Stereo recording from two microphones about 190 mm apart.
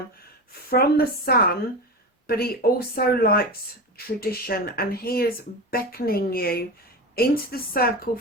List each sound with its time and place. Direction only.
0.7 s speech: 55° left (ahead or behind)